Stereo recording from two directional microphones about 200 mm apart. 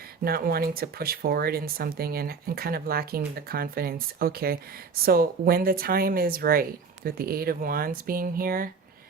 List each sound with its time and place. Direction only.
0.3 s speech: 50° right (ahead or behind)